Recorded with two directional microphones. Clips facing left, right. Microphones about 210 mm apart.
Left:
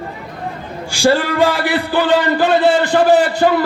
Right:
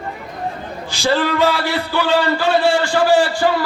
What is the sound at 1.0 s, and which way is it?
Speech, 50° left (ahead or behind).